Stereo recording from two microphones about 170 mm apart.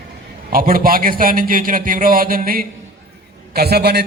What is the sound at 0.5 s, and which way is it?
A man's voice, 55° right (ahead or behind).